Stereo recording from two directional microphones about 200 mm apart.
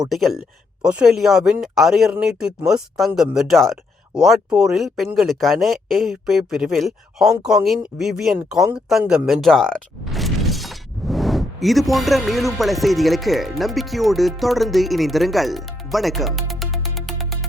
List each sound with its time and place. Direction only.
0.1 s speech: centre (ahead or behind)